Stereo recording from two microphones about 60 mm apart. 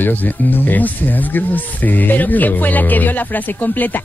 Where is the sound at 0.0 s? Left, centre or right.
Left.